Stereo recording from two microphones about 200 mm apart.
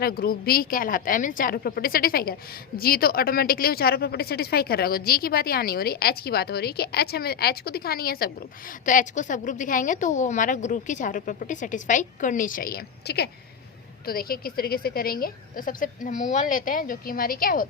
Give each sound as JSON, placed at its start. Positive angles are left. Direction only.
{"t": 0.0, "sound": "a woman's voice", "side_deg": 50}